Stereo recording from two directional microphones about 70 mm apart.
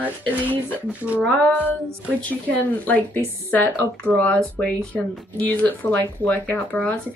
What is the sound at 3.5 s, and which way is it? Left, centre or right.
Speech, left.